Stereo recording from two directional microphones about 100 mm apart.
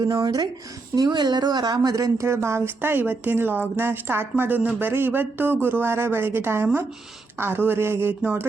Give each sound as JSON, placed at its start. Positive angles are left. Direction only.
{"t": 0.0, "sound": "speech", "side_deg": -40}